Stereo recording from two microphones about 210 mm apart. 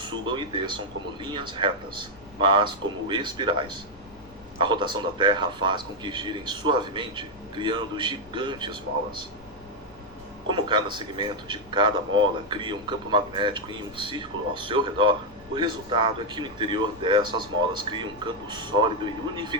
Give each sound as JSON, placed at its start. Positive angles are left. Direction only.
{"t": 0.0, "sound": "speech", "side_deg": -20}
{"t": 10.5, "sound": "speech", "side_deg": -20}